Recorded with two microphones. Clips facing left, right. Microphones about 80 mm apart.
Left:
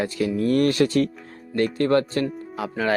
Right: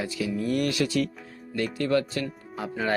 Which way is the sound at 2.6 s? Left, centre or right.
Left.